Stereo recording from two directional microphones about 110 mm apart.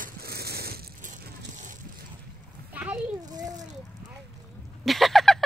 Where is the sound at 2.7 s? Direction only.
15° right (ahead or behind).